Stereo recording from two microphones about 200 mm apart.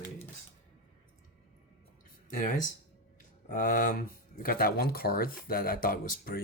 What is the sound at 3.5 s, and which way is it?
Speech, 40° left (ahead or behind).